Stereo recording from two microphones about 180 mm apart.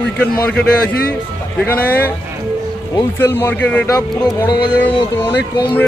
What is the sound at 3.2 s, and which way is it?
Speech, 10° left (ahead or behind).